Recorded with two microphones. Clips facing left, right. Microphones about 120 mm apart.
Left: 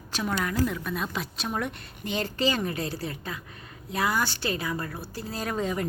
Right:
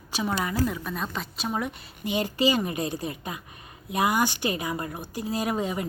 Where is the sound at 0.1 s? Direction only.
10° right (ahead or behind).